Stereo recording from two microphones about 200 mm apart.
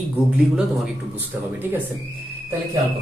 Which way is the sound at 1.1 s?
10° right (ahead or behind).